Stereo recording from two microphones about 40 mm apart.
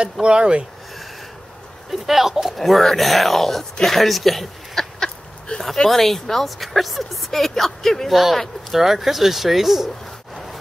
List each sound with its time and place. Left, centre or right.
0.0 s speech: right
1.9 s a woman's voice: centre
5.5 s a sound: left
5.9 s a woman's voice: centre
8.7 s a woman's voice: centre